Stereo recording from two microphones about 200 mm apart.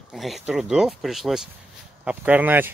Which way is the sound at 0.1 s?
Centre (ahead or behind).